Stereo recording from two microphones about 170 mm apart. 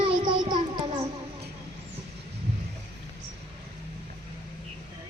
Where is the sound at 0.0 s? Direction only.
25° right (ahead or behind).